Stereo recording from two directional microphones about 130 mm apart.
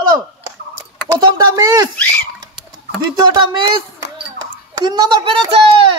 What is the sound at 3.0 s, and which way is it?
Speech, 30° right (ahead or behind).